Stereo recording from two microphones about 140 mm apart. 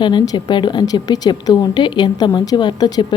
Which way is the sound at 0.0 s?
30° left (ahead or behind).